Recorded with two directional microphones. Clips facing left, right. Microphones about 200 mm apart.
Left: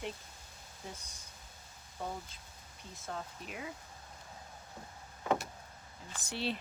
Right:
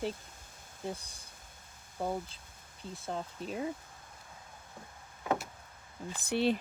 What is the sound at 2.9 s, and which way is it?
Speech, 30° right (ahead or behind).